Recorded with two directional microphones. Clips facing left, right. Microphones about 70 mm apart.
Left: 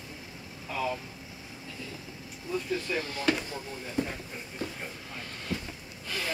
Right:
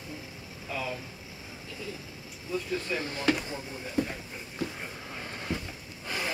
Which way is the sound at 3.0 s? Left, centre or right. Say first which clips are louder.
Right 1 dB; right.